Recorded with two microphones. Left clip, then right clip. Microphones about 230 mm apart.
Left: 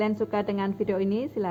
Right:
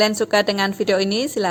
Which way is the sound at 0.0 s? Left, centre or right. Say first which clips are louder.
Right 10 dB; right.